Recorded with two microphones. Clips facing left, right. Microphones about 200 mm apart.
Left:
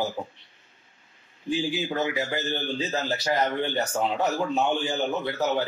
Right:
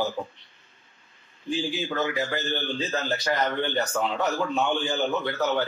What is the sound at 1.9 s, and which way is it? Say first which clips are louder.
A man's voice: even; 20° left (ahead or behind).